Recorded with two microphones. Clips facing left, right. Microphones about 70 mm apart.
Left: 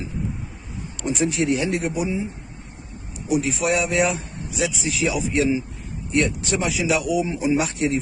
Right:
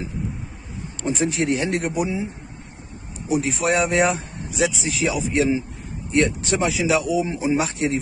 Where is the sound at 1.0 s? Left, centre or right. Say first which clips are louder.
Even; right.